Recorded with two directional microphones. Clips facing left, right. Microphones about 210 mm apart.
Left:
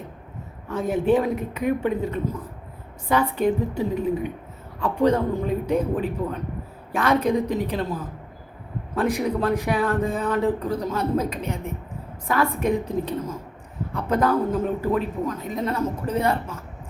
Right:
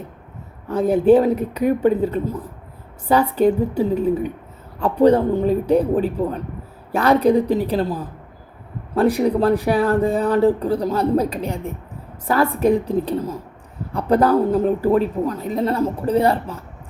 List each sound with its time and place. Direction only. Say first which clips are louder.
0.7 s speech: right 7 dB; 35° right (ahead or behind)